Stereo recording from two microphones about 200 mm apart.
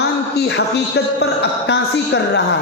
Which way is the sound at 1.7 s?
60° left (ahead or behind).